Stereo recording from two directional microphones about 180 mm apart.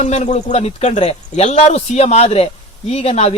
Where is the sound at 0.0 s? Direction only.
40° left (ahead or behind).